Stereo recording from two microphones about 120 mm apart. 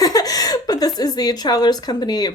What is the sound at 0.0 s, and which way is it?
A woman's voice, 30° left (ahead or behind).